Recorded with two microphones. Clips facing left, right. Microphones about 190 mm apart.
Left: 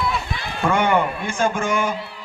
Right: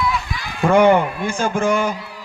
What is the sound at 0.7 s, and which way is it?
A man's voice, 65° right (ahead or behind).